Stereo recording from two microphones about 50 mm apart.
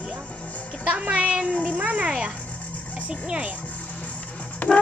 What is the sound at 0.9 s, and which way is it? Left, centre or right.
Speech, right.